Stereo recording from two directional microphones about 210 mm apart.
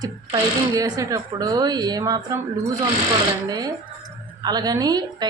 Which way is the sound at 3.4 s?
20° right (ahead or behind).